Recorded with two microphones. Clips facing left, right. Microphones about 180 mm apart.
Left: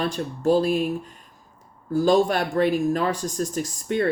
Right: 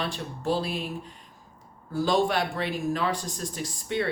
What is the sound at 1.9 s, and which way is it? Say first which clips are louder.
Speech: left 5 dB; 45° left (ahead or behind).